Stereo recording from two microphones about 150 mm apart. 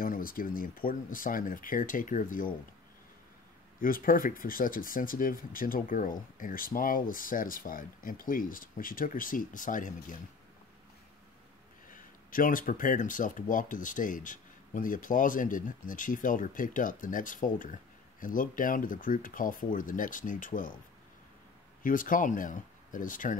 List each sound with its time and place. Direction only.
0.0 s speech: 70° left (ahead or behind)
3.8 s speech: 70° left (ahead or behind)
11.9 s speech: 65° left (ahead or behind)
21.8 s speech: 65° left (ahead or behind)